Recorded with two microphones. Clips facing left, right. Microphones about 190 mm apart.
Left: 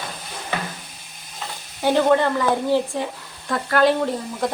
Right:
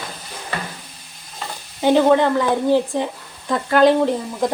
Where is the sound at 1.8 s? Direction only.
15° right (ahead or behind).